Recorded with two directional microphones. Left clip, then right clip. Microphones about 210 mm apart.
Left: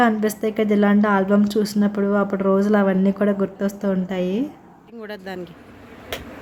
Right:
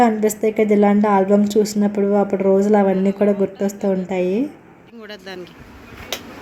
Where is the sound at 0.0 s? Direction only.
5° right (ahead or behind).